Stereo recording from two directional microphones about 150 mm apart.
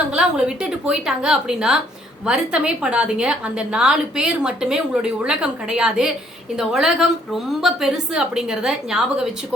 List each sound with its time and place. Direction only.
0.1 s a woman's voice: 5° right (ahead or behind)